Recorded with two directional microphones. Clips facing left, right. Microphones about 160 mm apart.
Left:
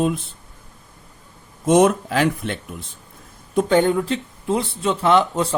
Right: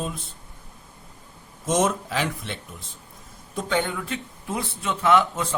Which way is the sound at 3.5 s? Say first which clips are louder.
Left 9 dB; 45° left (ahead or behind).